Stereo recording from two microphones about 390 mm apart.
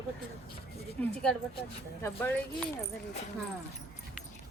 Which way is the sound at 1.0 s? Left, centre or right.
Centre.